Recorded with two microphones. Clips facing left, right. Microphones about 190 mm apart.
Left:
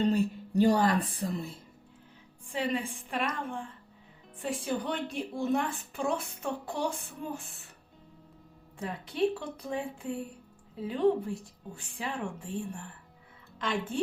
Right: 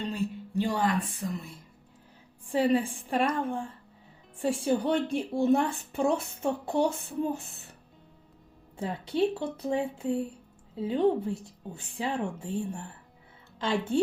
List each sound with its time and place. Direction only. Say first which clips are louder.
0.0 s speech: left 5 dB; 40° left (ahead or behind)
2.5 s a woman's voice: right 7 dB; 35° right (ahead or behind)
8.8 s a woman's voice: right 2 dB; 30° right (ahead or behind)